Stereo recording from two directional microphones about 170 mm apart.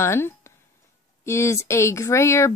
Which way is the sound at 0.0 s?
15° left (ahead or behind).